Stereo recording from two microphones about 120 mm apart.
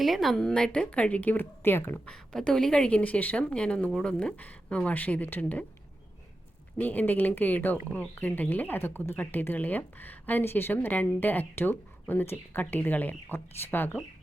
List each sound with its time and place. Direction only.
0.0 s speech: centre (ahead or behind); by 2.0 s 20° left (ahead or behind)
2.0 s speech: 5° left (ahead or behind)
6.7 s speech: 15° left (ahead or behind)